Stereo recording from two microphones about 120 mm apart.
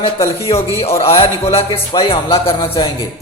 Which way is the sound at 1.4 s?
50° left (ahead or behind).